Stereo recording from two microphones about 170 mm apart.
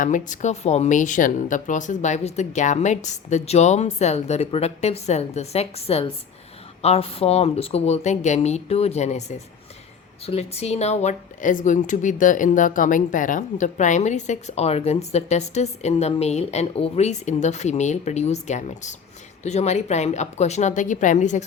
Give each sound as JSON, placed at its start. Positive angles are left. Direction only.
{"t": 0.0, "sound": "speech", "side_deg": 45}
{"t": 10.2, "sound": "a woman's voice", "side_deg": 40}